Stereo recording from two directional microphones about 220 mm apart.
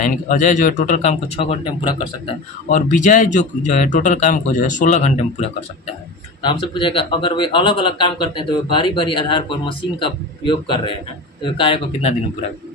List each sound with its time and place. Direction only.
0.0 s a man's voice: 35° left (ahead or behind)
2.6 s a man's voice: 35° left (ahead or behind)